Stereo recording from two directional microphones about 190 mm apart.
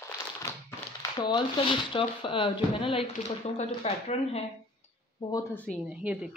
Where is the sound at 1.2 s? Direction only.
25° left (ahead or behind).